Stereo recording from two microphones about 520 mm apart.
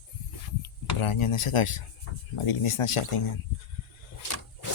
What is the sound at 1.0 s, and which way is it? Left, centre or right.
Speech, left.